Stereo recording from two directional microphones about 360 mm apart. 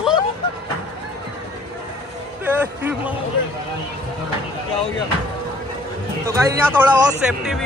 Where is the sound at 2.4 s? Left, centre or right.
Centre.